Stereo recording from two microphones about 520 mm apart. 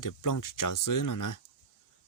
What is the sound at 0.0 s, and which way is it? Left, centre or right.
Speech, left.